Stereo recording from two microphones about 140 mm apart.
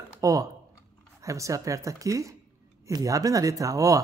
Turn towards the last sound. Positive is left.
turn(degrees=-25)  # may be behind; listen again after turning